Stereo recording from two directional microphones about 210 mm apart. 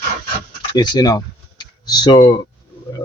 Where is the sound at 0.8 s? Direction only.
20° left (ahead or behind).